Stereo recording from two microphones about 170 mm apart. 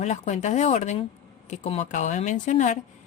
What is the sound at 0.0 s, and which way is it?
Speech, 40° left (ahead or behind).